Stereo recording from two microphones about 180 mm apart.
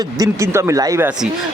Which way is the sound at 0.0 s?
20° right (ahead or behind).